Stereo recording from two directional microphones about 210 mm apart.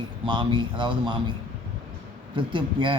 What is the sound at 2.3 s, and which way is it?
Speech, 25° right (ahead or behind).